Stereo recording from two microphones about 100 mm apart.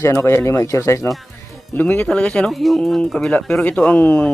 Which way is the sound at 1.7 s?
15° left (ahead or behind).